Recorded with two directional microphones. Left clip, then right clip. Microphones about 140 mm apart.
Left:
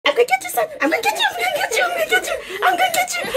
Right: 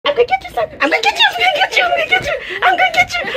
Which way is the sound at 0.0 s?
15° left (ahead or behind).